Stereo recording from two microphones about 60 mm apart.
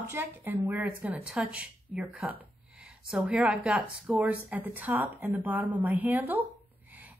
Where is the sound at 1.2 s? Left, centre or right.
Centre.